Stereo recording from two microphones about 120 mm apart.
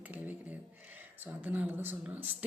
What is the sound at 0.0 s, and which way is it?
Speech, 15° right (ahead or behind).